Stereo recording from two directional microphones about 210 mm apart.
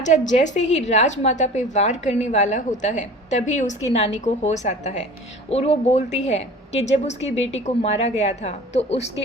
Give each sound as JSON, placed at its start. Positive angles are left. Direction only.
{"t": 0.0, "sound": "a woman's voice", "side_deg": 35}